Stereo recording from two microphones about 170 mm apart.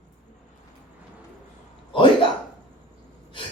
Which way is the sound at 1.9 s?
30° left (ahead or behind).